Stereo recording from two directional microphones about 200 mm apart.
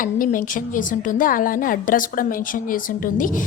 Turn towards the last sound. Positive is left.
turn(degrees=45)  # may be behind; listen again after turning